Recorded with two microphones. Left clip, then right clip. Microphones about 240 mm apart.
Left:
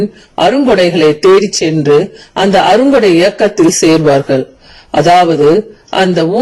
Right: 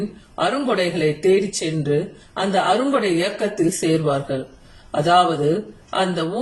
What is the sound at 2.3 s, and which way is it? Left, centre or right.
A man's voice, left.